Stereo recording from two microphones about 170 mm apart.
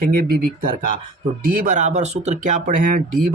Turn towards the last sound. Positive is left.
turn(degrees=-55)  # may be behind; listen again after turning